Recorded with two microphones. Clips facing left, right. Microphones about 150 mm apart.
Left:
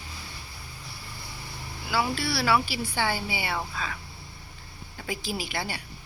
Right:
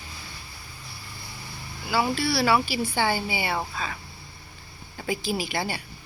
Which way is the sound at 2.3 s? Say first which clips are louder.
Right 2 dB; 25° right (ahead or behind).